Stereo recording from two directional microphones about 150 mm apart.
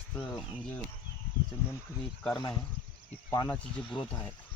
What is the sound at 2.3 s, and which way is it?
Speech, 25° left (ahead or behind).